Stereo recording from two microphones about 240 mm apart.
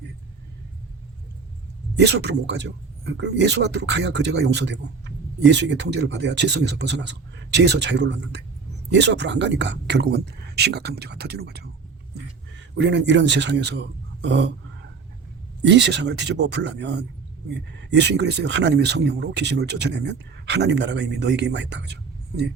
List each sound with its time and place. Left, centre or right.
2.0 s speech: right
12.7 s speech: right
14.2 s a sound: right
15.6 s speech: right